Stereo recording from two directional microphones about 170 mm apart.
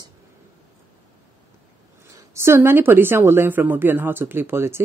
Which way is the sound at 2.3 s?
15° right (ahead or behind).